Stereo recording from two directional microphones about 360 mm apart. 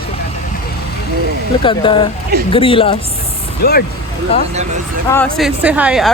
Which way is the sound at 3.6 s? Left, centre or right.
Left.